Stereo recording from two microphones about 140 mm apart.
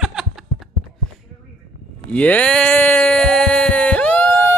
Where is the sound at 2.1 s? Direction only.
10° left (ahead or behind).